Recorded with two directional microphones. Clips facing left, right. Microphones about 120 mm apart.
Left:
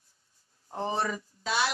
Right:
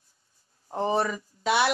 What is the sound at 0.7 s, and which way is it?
Speech, 55° right (ahead or behind).